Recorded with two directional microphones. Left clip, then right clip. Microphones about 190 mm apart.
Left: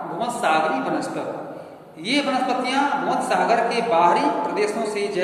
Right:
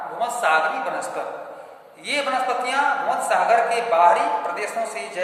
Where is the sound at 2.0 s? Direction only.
5° right (ahead or behind).